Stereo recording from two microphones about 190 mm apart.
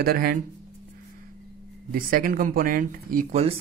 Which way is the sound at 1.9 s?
50° right (ahead or behind).